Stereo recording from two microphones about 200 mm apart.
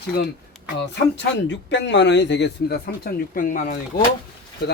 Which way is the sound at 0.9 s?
60° left (ahead or behind).